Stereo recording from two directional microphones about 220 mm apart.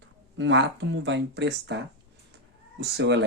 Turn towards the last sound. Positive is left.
turn(degrees=-50)  # may be behind; listen again after turning